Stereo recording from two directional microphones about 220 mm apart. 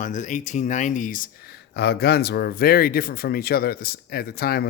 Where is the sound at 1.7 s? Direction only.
50° left (ahead or behind).